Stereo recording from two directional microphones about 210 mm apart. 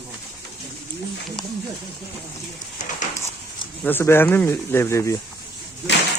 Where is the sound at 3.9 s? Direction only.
10° left (ahead or behind).